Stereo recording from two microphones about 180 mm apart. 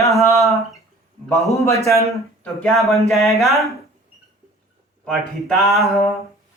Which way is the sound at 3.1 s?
Centre (ahead or behind).